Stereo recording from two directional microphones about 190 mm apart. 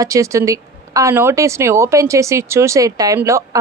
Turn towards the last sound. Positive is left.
turn(degrees=-15)  # may be behind; listen again after turning